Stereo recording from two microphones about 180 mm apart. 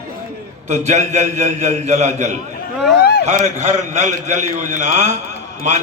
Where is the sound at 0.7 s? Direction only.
40° right (ahead or behind).